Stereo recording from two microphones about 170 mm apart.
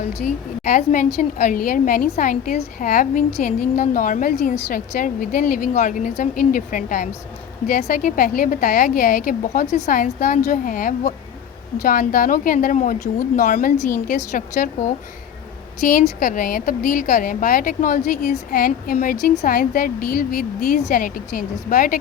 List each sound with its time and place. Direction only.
0.6 s a woman's voice: 45° left (ahead or behind)